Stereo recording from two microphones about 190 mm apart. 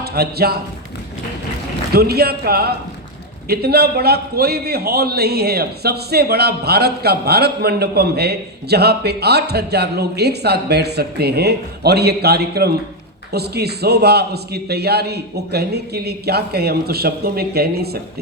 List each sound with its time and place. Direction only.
0.0 s a man's voice: 55° right (ahead or behind)
1.9 s a man's voice: 55° right (ahead or behind)